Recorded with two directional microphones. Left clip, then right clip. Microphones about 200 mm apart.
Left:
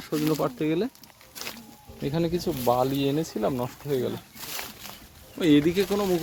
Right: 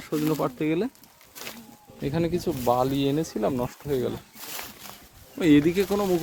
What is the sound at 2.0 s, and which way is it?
Speech, 5° right (ahead or behind).